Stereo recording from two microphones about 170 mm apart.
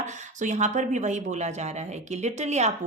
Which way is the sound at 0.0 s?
45° right (ahead or behind).